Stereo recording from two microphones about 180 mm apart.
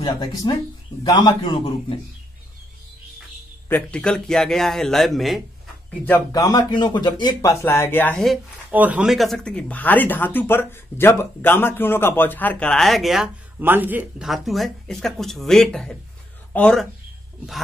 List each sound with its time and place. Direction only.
0.0 s speech: 20° left (ahead or behind)
3.6 s speech: 10° left (ahead or behind)
6.3 s speech: 20° left (ahead or behind); by 8.4 s 5° left (ahead or behind)
8.6 s speech: 10° right (ahead or behind)